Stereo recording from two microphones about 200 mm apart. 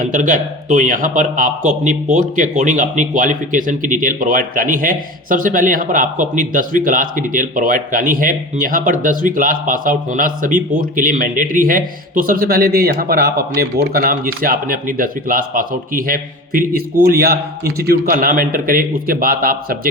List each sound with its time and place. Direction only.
0.0 s speech: 40° right (ahead or behind)